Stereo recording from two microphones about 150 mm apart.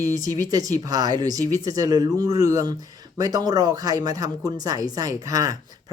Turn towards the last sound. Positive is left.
turn(degrees=-25)  # may be behind; listen again after turning